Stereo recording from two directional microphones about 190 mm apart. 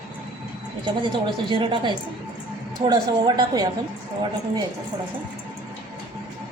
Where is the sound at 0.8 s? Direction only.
25° right (ahead or behind).